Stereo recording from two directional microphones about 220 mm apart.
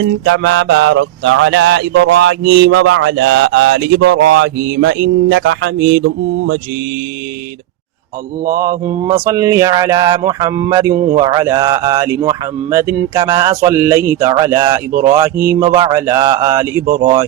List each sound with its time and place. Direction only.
0.0 s music: 60° right (ahead or behind)
9.0 s mantra: 15° right (ahead or behind)
16.8 s speech: 40° right (ahead or behind)